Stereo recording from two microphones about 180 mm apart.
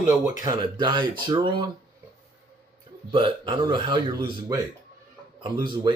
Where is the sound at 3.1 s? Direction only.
30° right (ahead or behind).